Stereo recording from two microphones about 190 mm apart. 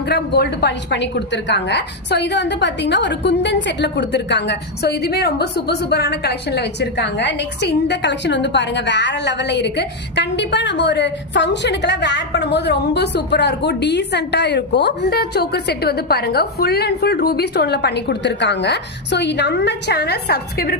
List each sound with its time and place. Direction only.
0.1 s a woman's voice: 60° left (ahead or behind)